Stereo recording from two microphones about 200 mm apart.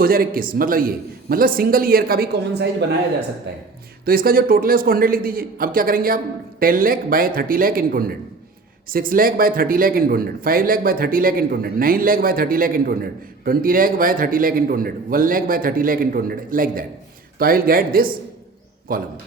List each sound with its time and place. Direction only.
0.0 s a man's voice: 45° right (ahead or behind)
4.0 s a man's voice: 45° right (ahead or behind)